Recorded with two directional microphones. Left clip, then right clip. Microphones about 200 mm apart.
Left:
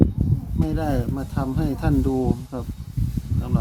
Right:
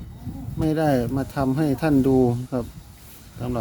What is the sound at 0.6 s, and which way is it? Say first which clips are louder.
Speech: right 5 dB; 30° right (ahead or behind).